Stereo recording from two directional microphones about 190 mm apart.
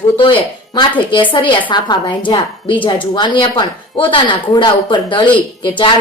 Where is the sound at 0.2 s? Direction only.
25° left (ahead or behind).